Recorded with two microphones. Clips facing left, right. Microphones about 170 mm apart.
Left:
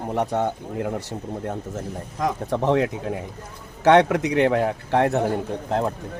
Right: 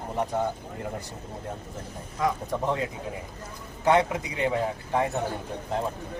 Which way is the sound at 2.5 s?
80° left.